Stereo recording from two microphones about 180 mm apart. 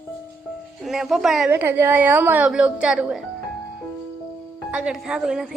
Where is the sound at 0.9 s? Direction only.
Centre (ahead or behind).